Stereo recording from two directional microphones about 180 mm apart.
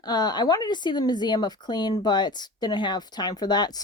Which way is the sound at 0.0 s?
20° left (ahead or behind).